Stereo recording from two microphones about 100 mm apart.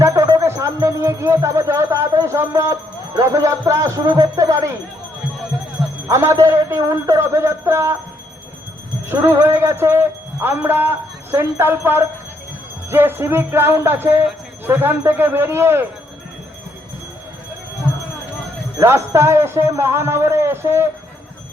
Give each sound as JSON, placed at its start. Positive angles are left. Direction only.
{"t": 0.0, "sound": "speech", "side_deg": -30}
{"t": 3.2, "sound": "music", "side_deg": -30}
{"t": 6.1, "sound": "music", "side_deg": -30}
{"t": 9.0, "sound": "music", "side_deg": -30}
{"t": 18.8, "sound": "music", "side_deg": -25}